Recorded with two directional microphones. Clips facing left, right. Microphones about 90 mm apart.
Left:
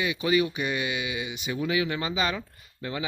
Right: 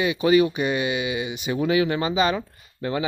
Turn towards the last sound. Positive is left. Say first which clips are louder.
# right 7 dB
turn(degrees=-40)  # may be behind; listen again after turning